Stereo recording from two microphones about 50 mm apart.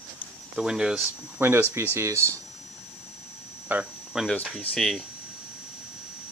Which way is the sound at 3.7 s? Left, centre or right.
Right.